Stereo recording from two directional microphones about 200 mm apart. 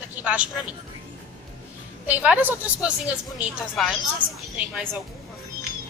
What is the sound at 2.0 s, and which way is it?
A woman's voice, 5° right (ahead or behind).